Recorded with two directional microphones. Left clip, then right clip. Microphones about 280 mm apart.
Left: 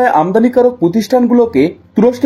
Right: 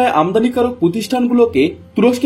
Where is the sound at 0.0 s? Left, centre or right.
Left.